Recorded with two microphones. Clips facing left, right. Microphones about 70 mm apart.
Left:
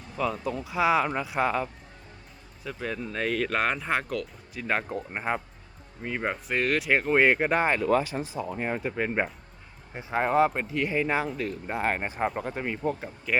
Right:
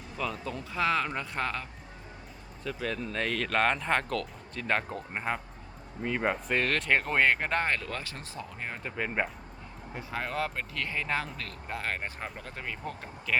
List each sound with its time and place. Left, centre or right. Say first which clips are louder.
0.2 s speech: left 6 dB; centre
9.9 s speech: left 10 dB; left